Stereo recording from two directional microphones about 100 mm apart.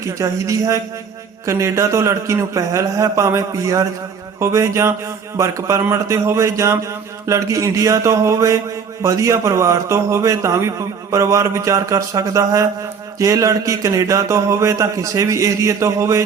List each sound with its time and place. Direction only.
0.0 s a man's voice: 30° right (ahead or behind)